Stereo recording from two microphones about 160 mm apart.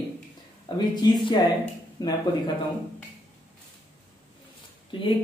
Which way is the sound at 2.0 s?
25° left (ahead or behind).